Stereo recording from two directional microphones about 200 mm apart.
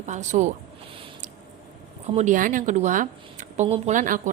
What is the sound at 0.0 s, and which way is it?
Speech, 35° right (ahead or behind).